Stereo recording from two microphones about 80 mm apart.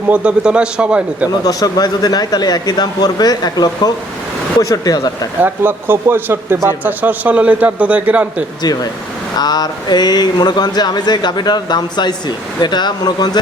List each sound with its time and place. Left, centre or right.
0.1 s a man's voice: centre
1.5 s speech: left
5.4 s a man's voice: right
8.6 s speech: left